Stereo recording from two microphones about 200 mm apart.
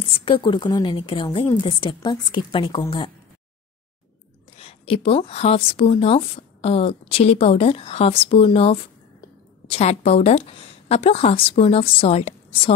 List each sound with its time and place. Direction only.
0.1 s speech: 25° left (ahead or behind)
4.6 s a woman's voice: 30° left (ahead or behind)